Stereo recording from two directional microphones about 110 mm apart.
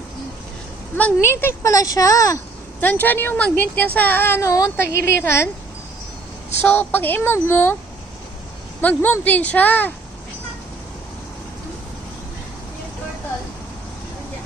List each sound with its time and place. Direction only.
0.9 s a woman's voice: 15° left (ahead or behind)
2.8 s a woman's voice: 15° left (ahead or behind)
6.6 s speech: 15° left (ahead or behind)
8.8 s speech: 15° left (ahead or behind)